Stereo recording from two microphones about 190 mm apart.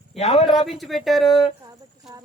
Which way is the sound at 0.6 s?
Centre (ahead or behind).